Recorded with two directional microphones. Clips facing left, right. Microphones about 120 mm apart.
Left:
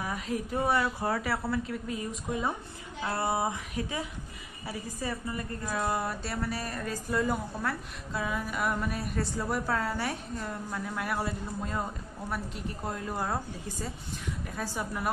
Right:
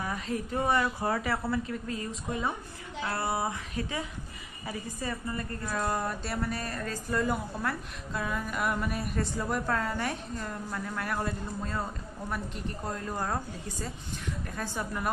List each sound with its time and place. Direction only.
0.0 s a woman's voice: 10° left (ahead or behind)
6.6 s a woman's voice: 10° left (ahead or behind)
12.8 s a woman's voice: 10° left (ahead or behind)